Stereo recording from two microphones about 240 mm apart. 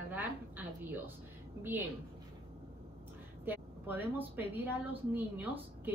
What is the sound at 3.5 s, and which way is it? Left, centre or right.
A woman's voice, centre.